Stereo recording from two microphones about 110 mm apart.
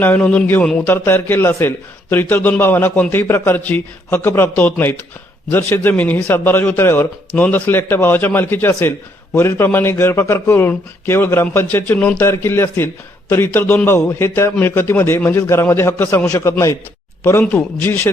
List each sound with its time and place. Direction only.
0.0 s a man's voice: 15° left (ahead or behind)